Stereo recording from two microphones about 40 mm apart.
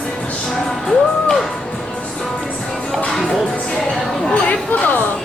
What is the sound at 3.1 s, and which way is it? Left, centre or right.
Speech, centre.